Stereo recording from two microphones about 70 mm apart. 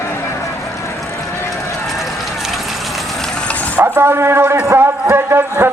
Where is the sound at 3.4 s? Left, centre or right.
Left.